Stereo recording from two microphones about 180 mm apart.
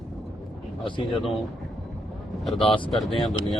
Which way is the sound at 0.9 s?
25° left (ahead or behind).